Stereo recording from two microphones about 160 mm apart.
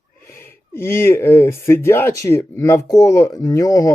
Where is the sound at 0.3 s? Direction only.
15° left (ahead or behind).